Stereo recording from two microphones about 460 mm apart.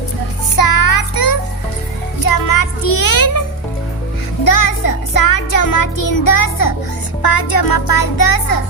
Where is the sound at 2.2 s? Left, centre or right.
Left.